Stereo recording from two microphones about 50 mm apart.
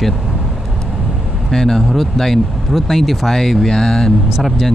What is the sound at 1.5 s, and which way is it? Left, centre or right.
Speech, centre.